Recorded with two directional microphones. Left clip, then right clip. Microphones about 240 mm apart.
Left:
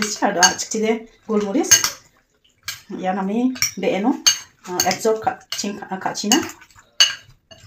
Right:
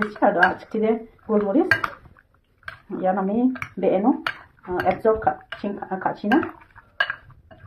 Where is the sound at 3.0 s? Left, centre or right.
Left.